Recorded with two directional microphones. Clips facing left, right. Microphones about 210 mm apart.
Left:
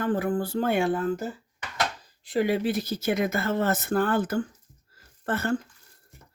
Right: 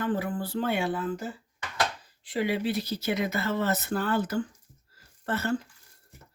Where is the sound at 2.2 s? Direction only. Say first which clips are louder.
Left 3 dB; 45° left (ahead or behind).